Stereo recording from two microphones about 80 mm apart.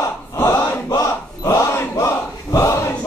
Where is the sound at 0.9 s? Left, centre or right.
Left.